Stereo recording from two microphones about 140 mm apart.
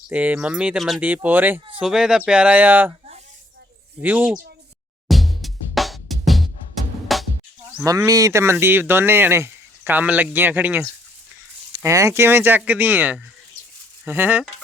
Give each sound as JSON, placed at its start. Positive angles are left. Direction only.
{"t": 0.1, "sound": "speech", "side_deg": -10}
{"t": 1.7, "sound": "speech", "side_deg": -5}
{"t": 4.0, "sound": "speech", "side_deg": -10}
{"t": 5.0, "sound": "music", "side_deg": 0}
{"t": 7.8, "sound": "speech", "side_deg": -25}